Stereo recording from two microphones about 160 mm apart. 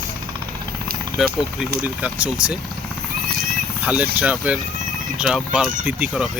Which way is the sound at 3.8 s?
10° right (ahead or behind).